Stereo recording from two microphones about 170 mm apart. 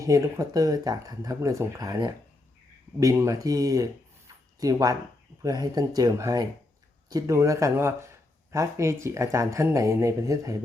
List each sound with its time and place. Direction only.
0.0 s speech: 20° right (ahead or behind)